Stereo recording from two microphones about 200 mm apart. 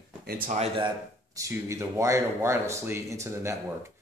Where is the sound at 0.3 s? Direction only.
40° right (ahead or behind).